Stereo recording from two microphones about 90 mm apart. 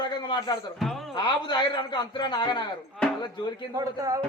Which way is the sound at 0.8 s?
Centre (ahead or behind).